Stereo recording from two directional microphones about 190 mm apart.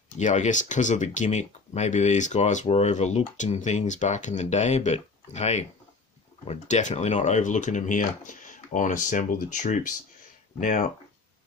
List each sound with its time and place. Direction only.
0.2 s speech: 40° left (ahead or behind)